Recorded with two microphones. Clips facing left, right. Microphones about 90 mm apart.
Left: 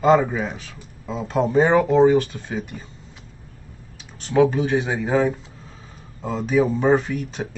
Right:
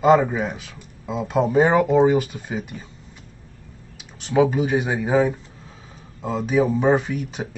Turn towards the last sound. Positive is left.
turn(degrees=-5)  # may be behind; listen again after turning